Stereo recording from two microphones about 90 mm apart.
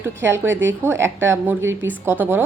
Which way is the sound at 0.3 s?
30° right (ahead or behind).